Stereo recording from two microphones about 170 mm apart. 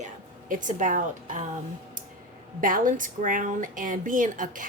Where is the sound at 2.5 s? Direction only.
55° right (ahead or behind).